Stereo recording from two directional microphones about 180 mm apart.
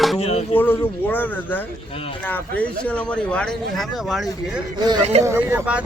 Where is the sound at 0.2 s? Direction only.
35° left (ahead or behind).